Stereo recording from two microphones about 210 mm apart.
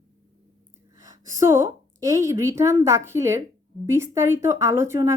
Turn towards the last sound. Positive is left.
turn(degrees=-10)  # may be behind; listen again after turning